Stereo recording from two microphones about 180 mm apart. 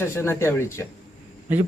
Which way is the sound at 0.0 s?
15° left (ahead or behind).